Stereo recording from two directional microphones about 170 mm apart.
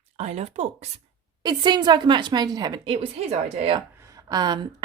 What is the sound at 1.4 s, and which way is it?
Speech, 25° right (ahead or behind).